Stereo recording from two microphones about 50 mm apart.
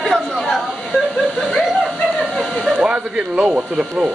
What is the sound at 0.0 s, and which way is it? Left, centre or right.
Chatter, centre.